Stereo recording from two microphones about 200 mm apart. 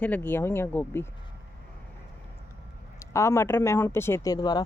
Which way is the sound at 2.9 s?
15° left (ahead or behind).